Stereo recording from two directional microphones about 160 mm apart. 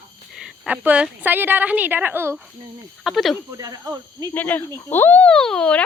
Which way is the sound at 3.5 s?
20° right (ahead or behind).